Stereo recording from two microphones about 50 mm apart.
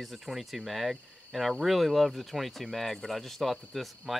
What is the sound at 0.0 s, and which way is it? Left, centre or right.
Speech, centre.